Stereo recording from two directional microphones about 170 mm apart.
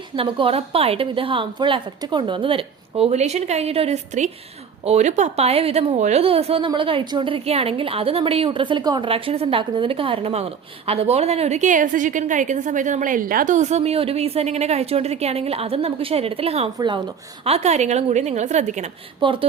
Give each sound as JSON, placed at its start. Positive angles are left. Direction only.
{"t": 0.2, "sound": "a woman's voice", "side_deg": -30}
{"t": 17.4, "sound": "a woman's voice", "side_deg": -40}
{"t": 19.2, "sound": "a woman's voice", "side_deg": -30}